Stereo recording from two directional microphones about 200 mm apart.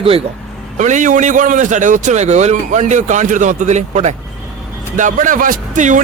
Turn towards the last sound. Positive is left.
turn(degrees=-40)  # may be behind; listen again after turning